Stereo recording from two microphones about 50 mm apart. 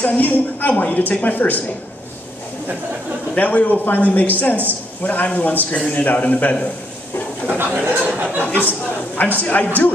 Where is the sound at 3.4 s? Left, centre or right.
Left.